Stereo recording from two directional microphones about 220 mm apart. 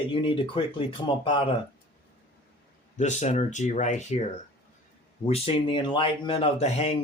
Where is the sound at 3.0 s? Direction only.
30° left (ahead or behind).